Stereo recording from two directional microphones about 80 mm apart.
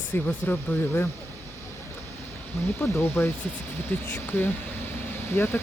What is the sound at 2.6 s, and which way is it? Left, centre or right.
Speech, left.